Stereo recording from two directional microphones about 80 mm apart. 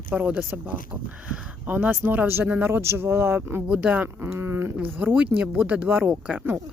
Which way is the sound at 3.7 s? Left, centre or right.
Centre.